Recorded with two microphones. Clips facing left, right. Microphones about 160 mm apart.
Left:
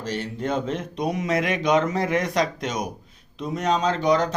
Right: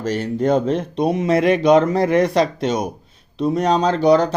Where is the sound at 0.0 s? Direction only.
45° right (ahead or behind).